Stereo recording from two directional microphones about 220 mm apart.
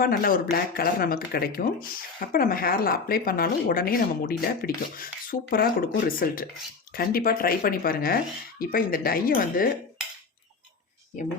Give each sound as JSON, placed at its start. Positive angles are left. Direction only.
{"t": 0.0, "sound": "speech", "side_deg": 40}